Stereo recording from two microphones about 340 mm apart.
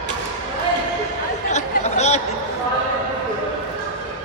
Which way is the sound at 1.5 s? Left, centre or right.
Centre.